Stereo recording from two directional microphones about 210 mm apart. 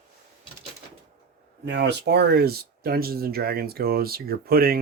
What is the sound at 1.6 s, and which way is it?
Speech, 55° right (ahead or behind).